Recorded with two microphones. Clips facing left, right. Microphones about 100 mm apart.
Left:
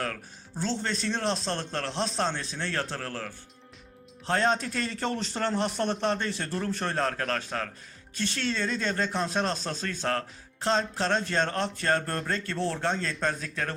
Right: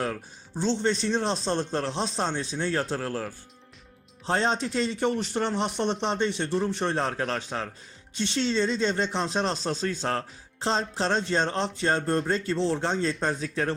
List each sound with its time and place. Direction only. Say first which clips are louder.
0.8 s speech: right 5 dB; 30° right (ahead or behind)
1.9 s speech: even; centre (ahead or behind)
2.4 s speech: right 4 dB; 25° right (ahead or behind)